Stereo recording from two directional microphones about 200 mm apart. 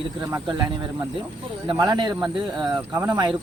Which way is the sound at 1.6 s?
20° right (ahead or behind).